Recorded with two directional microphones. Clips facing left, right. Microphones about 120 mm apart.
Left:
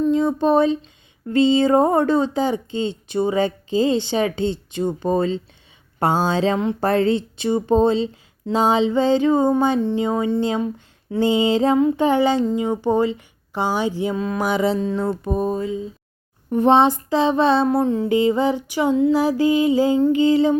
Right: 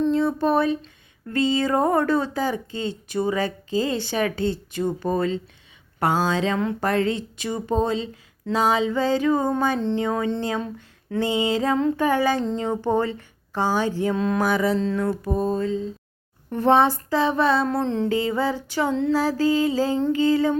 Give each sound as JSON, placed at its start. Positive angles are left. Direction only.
{"t": 0.1, "sound": "speech", "side_deg": 20}
{"t": 12.5, "sound": "music", "side_deg": 5}
{"t": 14.4, "sound": "speech", "side_deg": 20}
{"t": 14.9, "sound": "music", "side_deg": 25}
{"t": 16.5, "sound": "speech", "side_deg": 20}
{"t": 18.1, "sound": "music", "side_deg": 20}
{"t": 20.1, "sound": "speech", "side_deg": 20}